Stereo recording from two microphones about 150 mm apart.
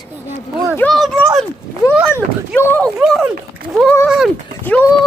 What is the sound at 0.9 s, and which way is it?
Speech, centre (ahead or behind).